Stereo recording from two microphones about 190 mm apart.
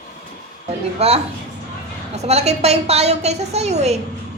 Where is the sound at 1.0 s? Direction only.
35° right (ahead or behind).